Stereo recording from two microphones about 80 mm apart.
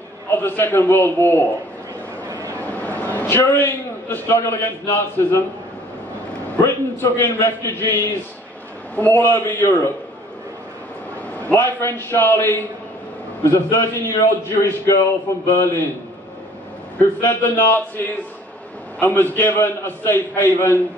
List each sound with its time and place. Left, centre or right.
0.3 s a man's voice: left
2.7 s a sound: left
4.9 s a man's voice: left
6.6 s a man's voice: left
11.5 s a man's voice: left
17.3 s a man's voice: left